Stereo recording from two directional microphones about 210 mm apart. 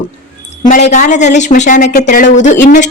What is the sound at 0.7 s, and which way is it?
A woman's voice, 35° left (ahead or behind).